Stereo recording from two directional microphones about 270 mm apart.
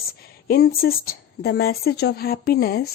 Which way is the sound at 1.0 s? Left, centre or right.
Left.